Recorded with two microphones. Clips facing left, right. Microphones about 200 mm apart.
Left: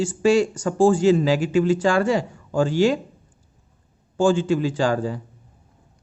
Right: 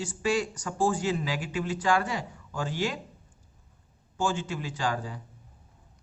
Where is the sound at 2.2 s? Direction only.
30° left (ahead or behind).